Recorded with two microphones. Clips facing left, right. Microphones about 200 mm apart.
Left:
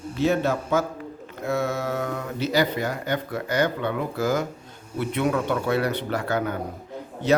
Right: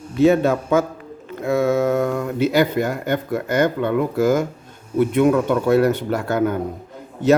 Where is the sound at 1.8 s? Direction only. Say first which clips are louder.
Right 9 dB; 50° right (ahead or behind).